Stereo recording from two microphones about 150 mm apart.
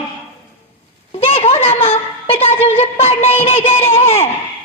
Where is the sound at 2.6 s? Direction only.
45° left (ahead or behind).